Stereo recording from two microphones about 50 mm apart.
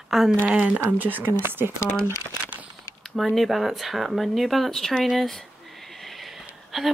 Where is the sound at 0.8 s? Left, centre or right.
Right.